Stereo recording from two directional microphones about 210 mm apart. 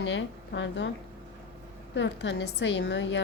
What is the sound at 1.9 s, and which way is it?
A woman's voice, 60° left (ahead or behind).